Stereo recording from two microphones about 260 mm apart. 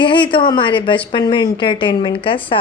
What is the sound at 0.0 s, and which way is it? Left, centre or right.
A woman's voice, centre.